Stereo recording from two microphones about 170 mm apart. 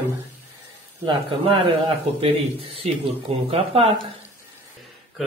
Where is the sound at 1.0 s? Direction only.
30° right (ahead or behind).